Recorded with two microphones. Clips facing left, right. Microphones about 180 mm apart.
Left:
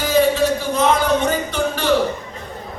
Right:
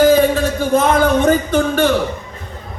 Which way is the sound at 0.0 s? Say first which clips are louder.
Right 4 dB; 50° right (ahead or behind).